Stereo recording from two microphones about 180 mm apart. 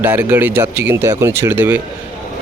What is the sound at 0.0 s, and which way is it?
Speech, 10° right (ahead or behind).